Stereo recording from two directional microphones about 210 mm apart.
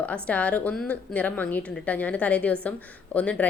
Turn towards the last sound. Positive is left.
turn(degrees=5)  # may be behind; listen again after turning